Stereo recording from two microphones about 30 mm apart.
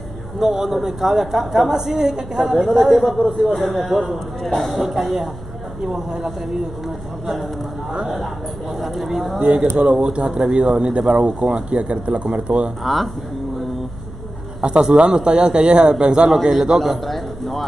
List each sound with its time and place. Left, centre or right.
0.4 s a woman's voice: centre
0.7 s a woman's voice: centre
3.3 s a man's voice: centre
5.9 s a man's voice: right
8.7 s a man's voice: centre
9.8 s speech: right
12.8 s a man's voice: centre
14.6 s a man's voice: right
16.7 s a man's voice: centre